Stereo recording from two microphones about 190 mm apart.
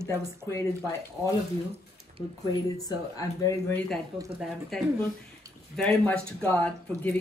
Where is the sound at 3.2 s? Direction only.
15° left (ahead or behind).